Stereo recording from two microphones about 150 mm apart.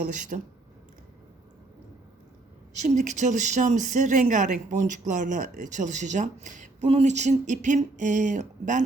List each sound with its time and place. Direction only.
0.3 s speech: 60° right (ahead or behind)
2.7 s speech: 55° right (ahead or behind)